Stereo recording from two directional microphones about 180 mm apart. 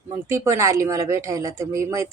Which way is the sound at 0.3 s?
15° right (ahead or behind).